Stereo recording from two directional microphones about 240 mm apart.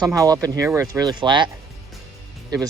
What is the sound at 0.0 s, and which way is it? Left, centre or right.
Speech, centre.